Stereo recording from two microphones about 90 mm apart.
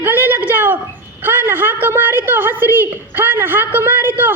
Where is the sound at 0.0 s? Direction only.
20° right (ahead or behind).